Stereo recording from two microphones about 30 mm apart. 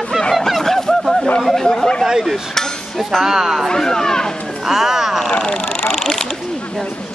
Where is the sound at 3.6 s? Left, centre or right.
Centre.